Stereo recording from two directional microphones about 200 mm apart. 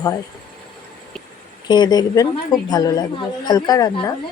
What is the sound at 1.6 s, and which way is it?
A woman's voice, 20° left (ahead or behind).